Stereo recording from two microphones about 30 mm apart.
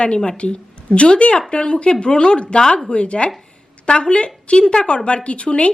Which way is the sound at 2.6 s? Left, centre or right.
Left.